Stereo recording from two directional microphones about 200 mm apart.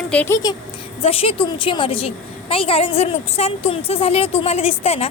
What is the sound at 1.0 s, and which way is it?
A woman's voice, 30° left (ahead or behind).